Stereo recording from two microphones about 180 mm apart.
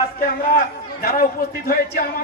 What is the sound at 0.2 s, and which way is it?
A man's voice, 55° left (ahead or behind).